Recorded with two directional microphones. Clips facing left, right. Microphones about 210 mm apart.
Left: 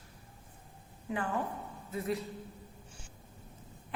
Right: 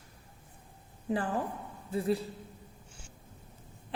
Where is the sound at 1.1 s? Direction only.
35° right (ahead or behind).